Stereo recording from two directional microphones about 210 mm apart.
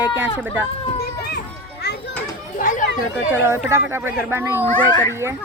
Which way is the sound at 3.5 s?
10° right (ahead or behind).